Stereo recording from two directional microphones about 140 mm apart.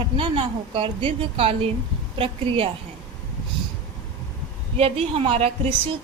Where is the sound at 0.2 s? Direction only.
40° right (ahead or behind).